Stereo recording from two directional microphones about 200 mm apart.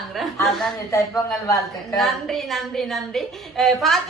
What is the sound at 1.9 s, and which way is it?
A woman's voice, centre (ahead or behind).